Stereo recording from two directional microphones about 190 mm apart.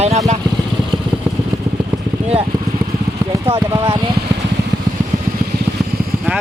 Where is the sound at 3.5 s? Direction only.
25° right (ahead or behind).